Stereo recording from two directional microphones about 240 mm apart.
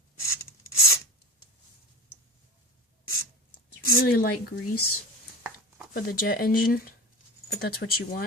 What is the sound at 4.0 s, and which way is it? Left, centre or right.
Speech, left.